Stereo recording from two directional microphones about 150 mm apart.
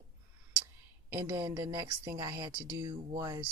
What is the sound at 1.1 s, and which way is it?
Speech, 25° right (ahead or behind).